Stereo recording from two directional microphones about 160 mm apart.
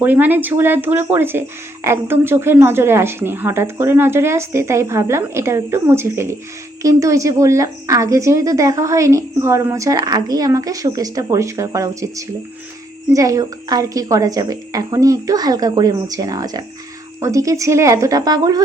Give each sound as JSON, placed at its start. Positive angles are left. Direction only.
{"t": 0.0, "sound": "speech", "side_deg": -10}